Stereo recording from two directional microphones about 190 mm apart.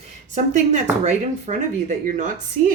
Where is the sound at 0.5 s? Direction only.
40° right (ahead or behind).